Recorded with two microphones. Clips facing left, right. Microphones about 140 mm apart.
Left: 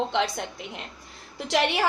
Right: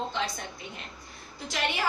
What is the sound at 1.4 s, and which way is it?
Speech, 80° left.